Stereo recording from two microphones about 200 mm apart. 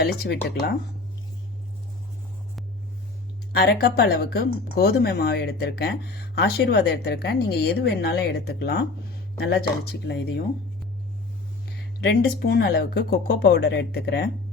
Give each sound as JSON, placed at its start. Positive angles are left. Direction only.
{"t": 0.0, "sound": "speech", "side_deg": 55}
{"t": 3.5, "sound": "speech", "side_deg": 55}
{"t": 11.9, "sound": "speech", "side_deg": 55}